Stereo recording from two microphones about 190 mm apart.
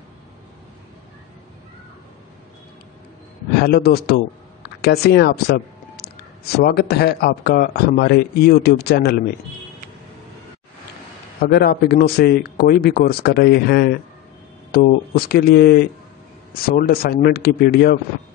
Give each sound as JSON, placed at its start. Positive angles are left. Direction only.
{"t": 3.5, "sound": "speech", "side_deg": 55}
{"t": 11.4, "sound": "speech", "side_deg": 55}